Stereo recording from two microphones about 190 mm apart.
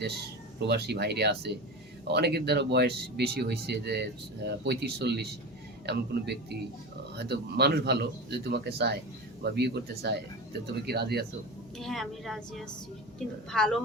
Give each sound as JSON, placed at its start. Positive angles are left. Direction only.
{"t": 0.7, "sound": "speech", "side_deg": -60}
{"t": 11.8, "sound": "a woman's voice", "side_deg": 0}